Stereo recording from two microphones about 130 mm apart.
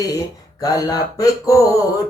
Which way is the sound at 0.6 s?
30° left (ahead or behind).